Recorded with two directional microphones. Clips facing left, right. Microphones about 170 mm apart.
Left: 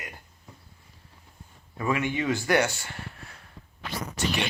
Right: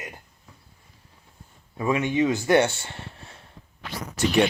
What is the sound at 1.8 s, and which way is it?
Speech, 20° right (ahead or behind).